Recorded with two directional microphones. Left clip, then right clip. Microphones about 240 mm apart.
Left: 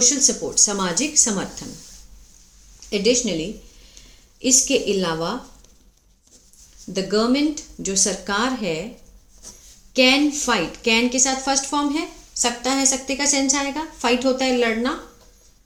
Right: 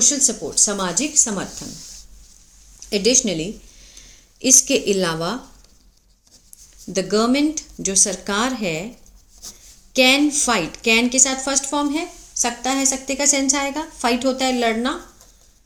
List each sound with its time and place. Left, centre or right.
0.0 s a woman's voice: centre
2.9 s a woman's voice: right
6.9 s speech: right
9.9 s a woman's voice: right